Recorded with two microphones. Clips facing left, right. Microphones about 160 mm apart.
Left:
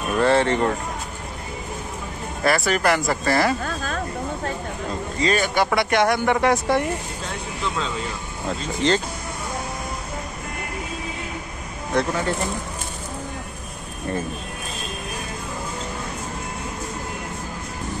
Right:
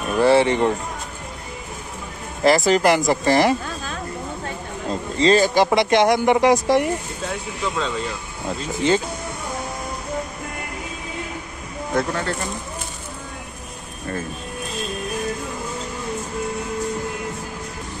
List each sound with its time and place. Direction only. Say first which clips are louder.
0.1 s speech: right 3 dB; 10° right (ahead or behind)
2.4 s speech: right 5 dB; 20° right (ahead or behind)
5.2 s speech: right 5 dB; 30° right (ahead or behind)
8.5 s speech: right 1 dB; 10° right (ahead or behind)
11.9 s speech: even; centre (ahead or behind)